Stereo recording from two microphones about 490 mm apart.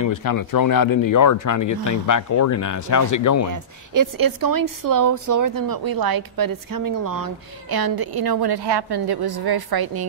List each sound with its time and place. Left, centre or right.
0.0 s speech: left
3.9 s a woman's voice: right